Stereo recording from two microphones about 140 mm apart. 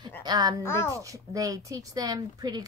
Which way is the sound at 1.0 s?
25° right (ahead or behind).